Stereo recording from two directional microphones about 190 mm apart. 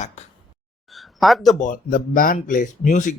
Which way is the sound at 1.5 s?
45° left (ahead or behind).